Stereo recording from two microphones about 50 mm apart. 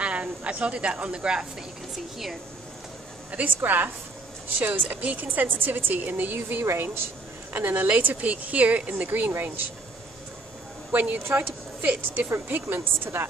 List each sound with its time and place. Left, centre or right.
0.0 s a woman's voice: right
3.4 s a woman's voice: right
6.8 s a woman's voice: right
7.9 s a woman's voice: right
10.9 s a woman's voice: right